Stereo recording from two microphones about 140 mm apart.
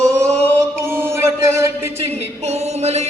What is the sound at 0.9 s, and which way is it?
Music, 20° right (ahead or behind).